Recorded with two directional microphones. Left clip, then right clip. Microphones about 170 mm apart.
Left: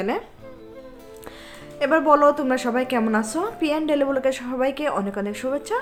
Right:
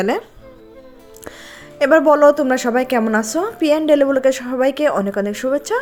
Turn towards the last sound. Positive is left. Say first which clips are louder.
# right 7 dB
turn(degrees=-35)  # may be behind; listen again after turning